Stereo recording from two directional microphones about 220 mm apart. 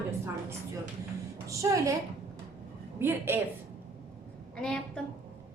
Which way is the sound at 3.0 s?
10° right (ahead or behind).